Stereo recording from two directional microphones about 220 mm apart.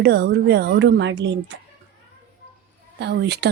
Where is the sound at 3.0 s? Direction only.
50° right (ahead or behind).